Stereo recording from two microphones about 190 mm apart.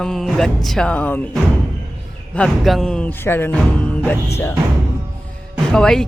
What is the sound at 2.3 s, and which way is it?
Speech, 5° left (ahead or behind).